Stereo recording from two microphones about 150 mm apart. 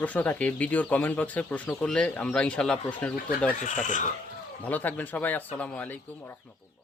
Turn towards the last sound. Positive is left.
turn(degrees=10)  # may be behind; listen again after turning